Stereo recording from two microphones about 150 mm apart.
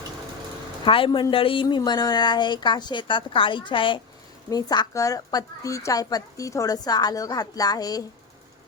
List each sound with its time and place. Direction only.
0.9 s a woman's voice: 35° left (ahead or behind)